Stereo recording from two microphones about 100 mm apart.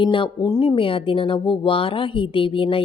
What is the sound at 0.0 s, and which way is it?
A woman's voice, 60° left (ahead or behind).